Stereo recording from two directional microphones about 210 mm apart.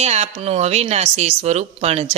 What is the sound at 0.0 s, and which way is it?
Speech, 30° right (ahead or behind).